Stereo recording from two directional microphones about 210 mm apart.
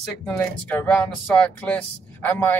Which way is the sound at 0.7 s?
5° left (ahead or behind).